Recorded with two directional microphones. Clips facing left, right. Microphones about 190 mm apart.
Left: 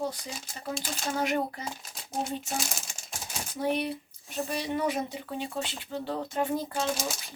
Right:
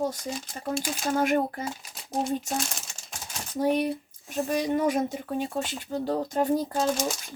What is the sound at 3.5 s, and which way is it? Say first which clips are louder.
Speech: right 5 dB; 40° right (ahead or behind).